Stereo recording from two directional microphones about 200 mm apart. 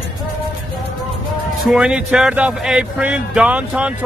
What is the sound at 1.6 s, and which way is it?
Speech, 5° right (ahead or behind).